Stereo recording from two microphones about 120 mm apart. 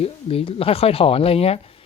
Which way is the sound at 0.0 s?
55° left (ahead or behind).